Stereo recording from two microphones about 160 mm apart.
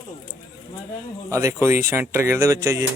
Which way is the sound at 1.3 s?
20° right (ahead or behind).